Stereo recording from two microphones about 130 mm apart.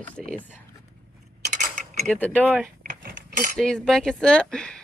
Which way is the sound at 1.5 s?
70° right (ahead or behind).